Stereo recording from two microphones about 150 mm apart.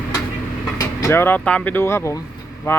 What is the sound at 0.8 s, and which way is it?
Speech, 20° left (ahead or behind).